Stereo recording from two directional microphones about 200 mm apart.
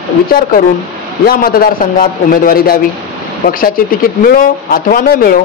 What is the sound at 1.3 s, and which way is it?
Speech, 45° left (ahead or behind).